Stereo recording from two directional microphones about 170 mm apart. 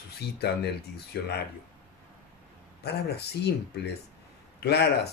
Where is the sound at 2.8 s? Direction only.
75° left (ahead or behind).